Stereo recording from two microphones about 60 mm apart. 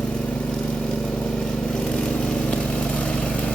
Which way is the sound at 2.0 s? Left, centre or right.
Centre.